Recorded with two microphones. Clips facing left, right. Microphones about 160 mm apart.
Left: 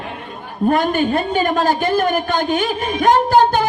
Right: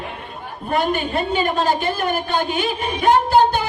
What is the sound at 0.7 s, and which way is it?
A man's voice, 45° left (ahead or behind).